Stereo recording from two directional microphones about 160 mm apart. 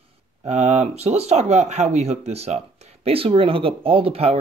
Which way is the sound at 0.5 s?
45° right (ahead or behind).